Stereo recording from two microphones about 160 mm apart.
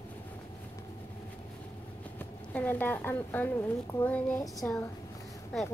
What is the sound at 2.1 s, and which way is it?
Speech, 10° left (ahead or behind).